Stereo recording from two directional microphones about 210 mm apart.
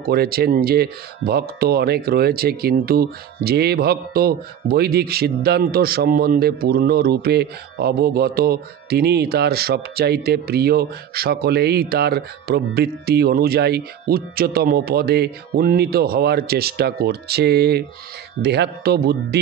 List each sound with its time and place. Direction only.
0.0 s speech: 50° right (ahead or behind)